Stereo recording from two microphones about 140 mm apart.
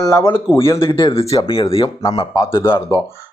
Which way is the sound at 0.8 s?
40° left (ahead or behind).